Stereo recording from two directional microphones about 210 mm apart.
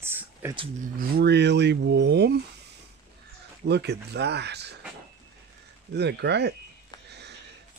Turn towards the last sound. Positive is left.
turn(degrees=-55)  # may be behind; listen again after turning